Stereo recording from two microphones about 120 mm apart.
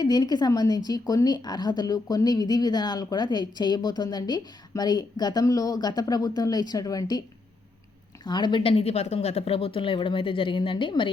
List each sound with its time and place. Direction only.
0.0 s a woman's voice: 35° left (ahead or behind)
8.2 s a woman's voice: 35° left (ahead or behind)
8.7 s speech: 60° left (ahead or behind); by 11.1 s 45° left (ahead or behind)